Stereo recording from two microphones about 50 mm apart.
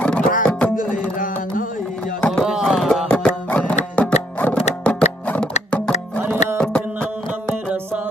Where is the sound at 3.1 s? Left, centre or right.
Left.